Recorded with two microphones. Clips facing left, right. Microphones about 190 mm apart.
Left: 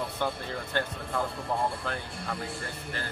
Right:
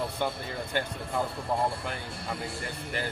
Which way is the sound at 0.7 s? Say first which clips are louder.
Even; 15° right (ahead or behind).